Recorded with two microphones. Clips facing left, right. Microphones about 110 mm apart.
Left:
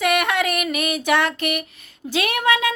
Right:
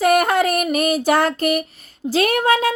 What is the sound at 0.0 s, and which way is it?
Female singing, 40° right (ahead or behind).